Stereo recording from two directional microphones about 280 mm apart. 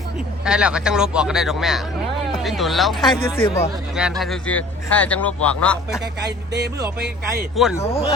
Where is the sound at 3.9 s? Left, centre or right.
Centre.